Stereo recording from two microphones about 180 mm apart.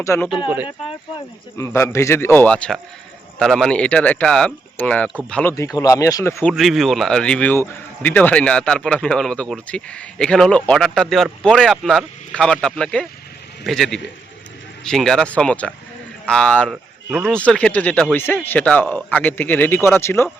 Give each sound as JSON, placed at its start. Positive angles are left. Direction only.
{"t": 0.0, "sound": "speech", "side_deg": 15}
{"t": 1.5, "sound": "speech", "side_deg": 15}
{"t": 6.5, "sound": "speech", "side_deg": 0}